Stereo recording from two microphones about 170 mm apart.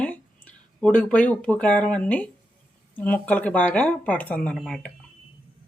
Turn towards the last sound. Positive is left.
turn(degrees=0)  # may be behind; listen again after turning